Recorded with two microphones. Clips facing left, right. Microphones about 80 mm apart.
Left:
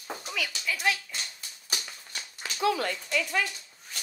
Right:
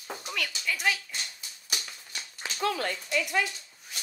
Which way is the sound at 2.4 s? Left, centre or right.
Right.